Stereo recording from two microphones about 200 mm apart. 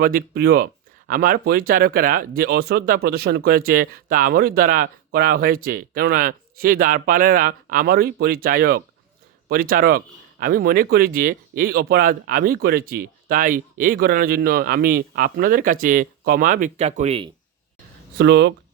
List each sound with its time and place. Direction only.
0.0 s speech: 45° right (ahead or behind); by 17.3 s 30° right (ahead or behind)
18.2 s speech: 60° right (ahead or behind)